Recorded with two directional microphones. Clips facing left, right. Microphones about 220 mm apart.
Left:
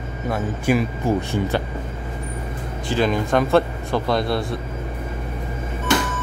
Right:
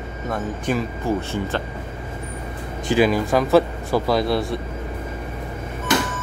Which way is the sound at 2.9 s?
5° right (ahead or behind).